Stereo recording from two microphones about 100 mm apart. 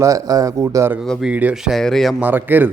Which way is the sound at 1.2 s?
15° right (ahead or behind).